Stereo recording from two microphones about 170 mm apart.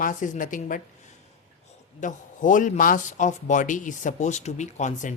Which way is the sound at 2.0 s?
50° left (ahead or behind).